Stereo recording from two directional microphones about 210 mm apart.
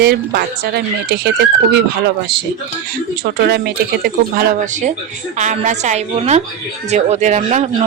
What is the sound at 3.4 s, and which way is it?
Speech, 50° right (ahead or behind).